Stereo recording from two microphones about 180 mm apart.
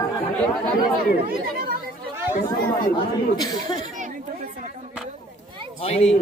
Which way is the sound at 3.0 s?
20° left (ahead or behind).